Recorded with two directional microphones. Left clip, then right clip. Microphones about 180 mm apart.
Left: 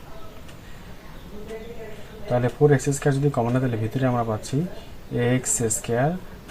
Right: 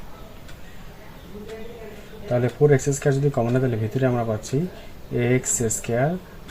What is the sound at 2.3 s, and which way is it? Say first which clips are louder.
Speech: right 1 dB; 20° right (ahead or behind).